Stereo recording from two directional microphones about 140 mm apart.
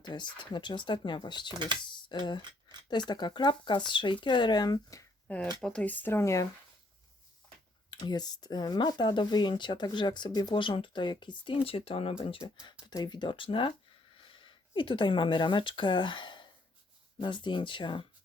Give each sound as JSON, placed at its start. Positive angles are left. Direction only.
{"t": 0.0, "sound": "speech", "side_deg": 30}
{"t": 5.5, "sound": "speech", "side_deg": 5}
{"t": 7.9, "sound": "speech", "side_deg": 30}